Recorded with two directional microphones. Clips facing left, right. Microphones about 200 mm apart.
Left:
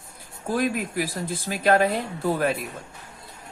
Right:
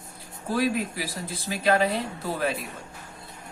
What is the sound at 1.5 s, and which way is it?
Speech, 50° left (ahead or behind).